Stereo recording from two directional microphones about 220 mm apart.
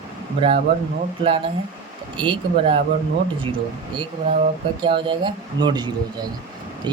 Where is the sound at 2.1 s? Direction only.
20° right (ahead or behind).